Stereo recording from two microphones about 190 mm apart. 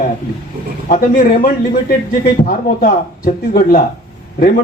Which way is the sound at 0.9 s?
45° left (ahead or behind).